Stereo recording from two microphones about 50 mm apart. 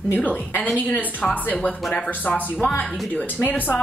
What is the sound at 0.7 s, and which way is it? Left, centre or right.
Speech, left.